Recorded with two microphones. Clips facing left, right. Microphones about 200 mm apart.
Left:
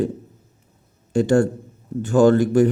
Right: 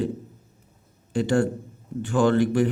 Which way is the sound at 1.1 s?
45° left (ahead or behind).